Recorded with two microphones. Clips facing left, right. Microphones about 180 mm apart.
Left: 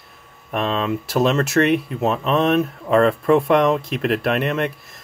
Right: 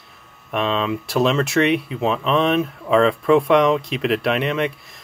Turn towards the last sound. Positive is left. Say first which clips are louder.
# even
turn(degrees=0)  # may be behind; listen again after turning